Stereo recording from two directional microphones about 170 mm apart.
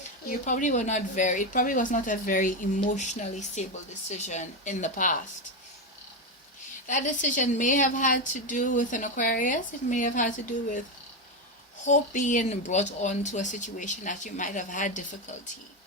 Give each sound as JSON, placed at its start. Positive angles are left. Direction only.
{"t": 0.3, "sound": "a woman's voice", "side_deg": 50}
{"t": 6.8, "sound": "a woman's voice", "side_deg": 45}
{"t": 11.9, "sound": "a woman's voice", "side_deg": 45}